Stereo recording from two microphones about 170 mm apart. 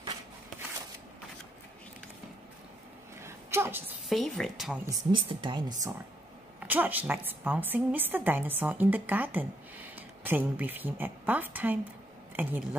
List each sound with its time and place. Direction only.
3.2 s a sound: 15° right (ahead or behind)
4.1 s a woman's voice: centre (ahead or behind)
4.8 s speech: 30° right (ahead or behind)
6.6 s a woman's voice: 10° right (ahead or behind)